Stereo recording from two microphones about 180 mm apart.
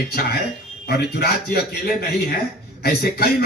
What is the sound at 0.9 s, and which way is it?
Speech, 60° left (ahead or behind).